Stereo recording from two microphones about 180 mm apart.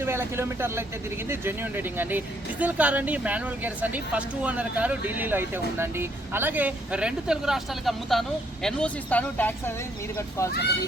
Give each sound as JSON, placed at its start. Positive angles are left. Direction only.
{"t": 0.0, "sound": "speech", "side_deg": -15}